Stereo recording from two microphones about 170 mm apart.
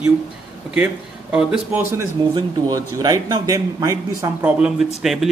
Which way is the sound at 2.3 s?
25° right (ahead or behind).